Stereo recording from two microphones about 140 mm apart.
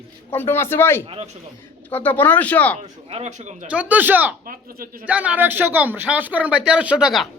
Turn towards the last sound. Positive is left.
turn(degrees=-5)  # may be behind; listen again after turning